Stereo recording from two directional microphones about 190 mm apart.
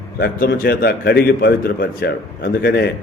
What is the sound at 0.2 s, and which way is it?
A man's voice, 50° left (ahead or behind).